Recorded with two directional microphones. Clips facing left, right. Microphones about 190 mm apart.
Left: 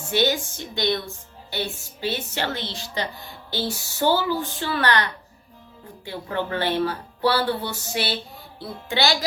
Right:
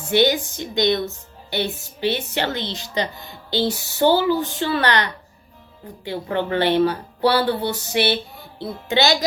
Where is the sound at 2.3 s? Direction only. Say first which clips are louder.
Right 4 dB; 20° right (ahead or behind).